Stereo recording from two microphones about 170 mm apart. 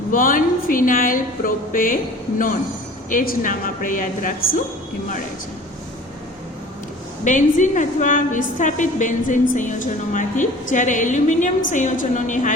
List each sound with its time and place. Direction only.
0.1 s a woman's voice: 55° left (ahead or behind)
3.1 s a woman's voice: 50° left (ahead or behind)
7.3 s a woman's voice: 50° left (ahead or behind)